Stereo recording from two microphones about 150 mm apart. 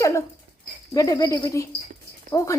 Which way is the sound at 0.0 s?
20° left (ahead or behind).